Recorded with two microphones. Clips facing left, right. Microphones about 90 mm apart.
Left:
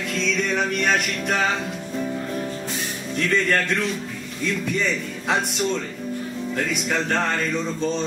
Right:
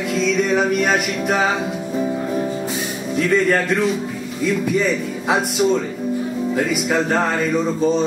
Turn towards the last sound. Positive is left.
turn(degrees=-5)  # may be behind; listen again after turning